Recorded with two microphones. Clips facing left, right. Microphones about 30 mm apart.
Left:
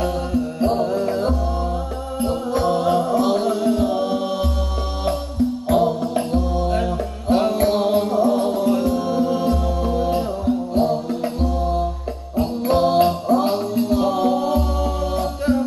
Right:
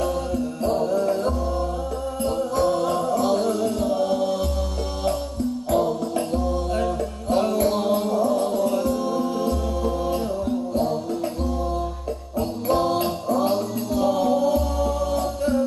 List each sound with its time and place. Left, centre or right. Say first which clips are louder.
0.0 s music: left 2 dB; left
5.7 s music: left 3 dB; left